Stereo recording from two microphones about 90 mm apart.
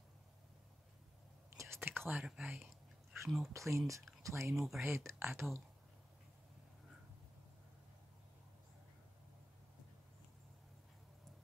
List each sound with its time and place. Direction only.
1.8 s whispering: 20° right (ahead or behind); by 3.2 s 5° right (ahead or behind)
3.3 s speech: centre (ahead or behind)
3.5 s speech: 35° right (ahead or behind)
4.6 s speech: centre (ahead or behind)
4.8 s speech: 25° right (ahead or behind)